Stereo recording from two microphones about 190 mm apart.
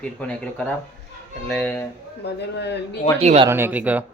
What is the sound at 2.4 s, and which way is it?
Speech, 65° left (ahead or behind).